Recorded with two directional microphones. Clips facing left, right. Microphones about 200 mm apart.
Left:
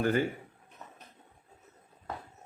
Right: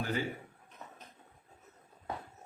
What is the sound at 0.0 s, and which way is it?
Speech, 55° left (ahead or behind).